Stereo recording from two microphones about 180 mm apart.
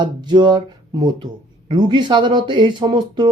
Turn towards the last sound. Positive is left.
turn(degrees=-25)  # may be behind; listen again after turning